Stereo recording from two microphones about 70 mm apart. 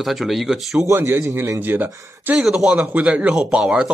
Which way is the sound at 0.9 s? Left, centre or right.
Right.